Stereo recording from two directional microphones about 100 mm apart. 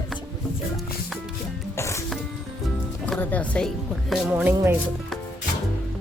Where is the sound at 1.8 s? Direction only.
30° left (ahead or behind).